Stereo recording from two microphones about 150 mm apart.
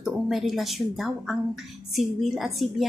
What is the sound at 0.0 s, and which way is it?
A woman's voice, centre (ahead or behind).